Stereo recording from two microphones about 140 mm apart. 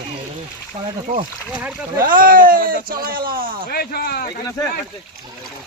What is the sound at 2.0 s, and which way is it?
Speech, 80° right.